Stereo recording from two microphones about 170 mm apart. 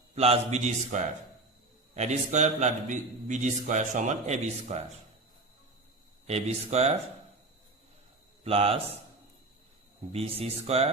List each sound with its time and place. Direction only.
0.2 s a man's voice: 40° right (ahead or behind)
6.2 s a man's voice: 40° right (ahead or behind)
8.4 s a man's voice: 35° right (ahead or behind)
10.1 s a man's voice: 35° right (ahead or behind)